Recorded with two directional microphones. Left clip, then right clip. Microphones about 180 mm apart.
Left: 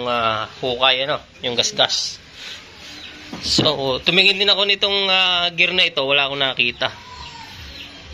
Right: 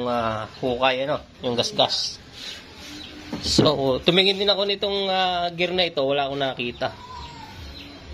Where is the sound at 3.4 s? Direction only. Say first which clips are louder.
Left 2 dB; 30° right (ahead or behind).